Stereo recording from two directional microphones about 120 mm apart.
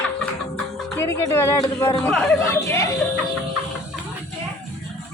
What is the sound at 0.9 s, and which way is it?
Speech, 20° left (ahead or behind).